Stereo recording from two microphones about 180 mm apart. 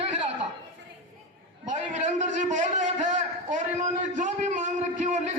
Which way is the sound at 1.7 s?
40° right (ahead or behind).